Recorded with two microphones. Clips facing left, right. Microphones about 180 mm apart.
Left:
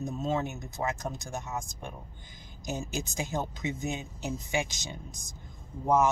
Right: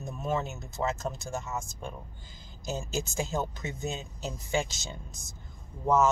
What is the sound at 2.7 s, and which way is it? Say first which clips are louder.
Speech: right 3 dB; 15° left (ahead or behind).